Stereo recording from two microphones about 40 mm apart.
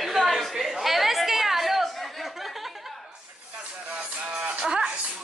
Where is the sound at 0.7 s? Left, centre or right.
Centre.